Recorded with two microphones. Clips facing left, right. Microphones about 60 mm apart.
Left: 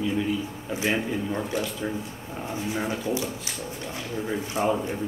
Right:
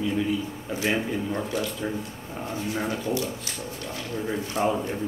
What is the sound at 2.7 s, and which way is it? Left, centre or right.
Speech, centre.